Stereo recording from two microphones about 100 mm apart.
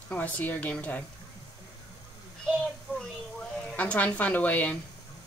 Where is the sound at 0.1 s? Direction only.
15° left (ahead or behind).